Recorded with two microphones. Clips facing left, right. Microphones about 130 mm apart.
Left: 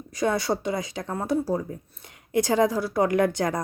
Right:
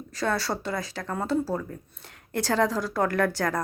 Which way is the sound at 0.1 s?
15° left (ahead or behind).